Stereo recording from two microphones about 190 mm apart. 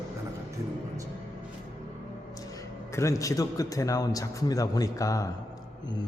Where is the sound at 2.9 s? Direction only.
15° left (ahead or behind).